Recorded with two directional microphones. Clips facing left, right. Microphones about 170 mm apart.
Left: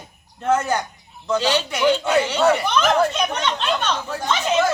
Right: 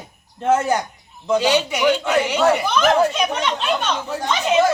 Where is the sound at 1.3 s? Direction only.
15° right (ahead or behind).